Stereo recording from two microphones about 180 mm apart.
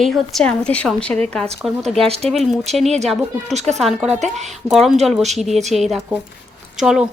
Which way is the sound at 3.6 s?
40° right (ahead or behind).